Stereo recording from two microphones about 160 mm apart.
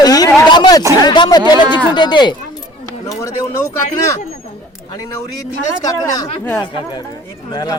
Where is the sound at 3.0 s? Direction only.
20° left (ahead or behind).